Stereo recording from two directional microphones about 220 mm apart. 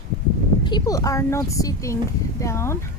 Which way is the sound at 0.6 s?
15° left (ahead or behind).